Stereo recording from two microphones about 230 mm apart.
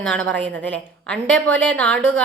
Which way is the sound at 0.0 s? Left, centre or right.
Centre.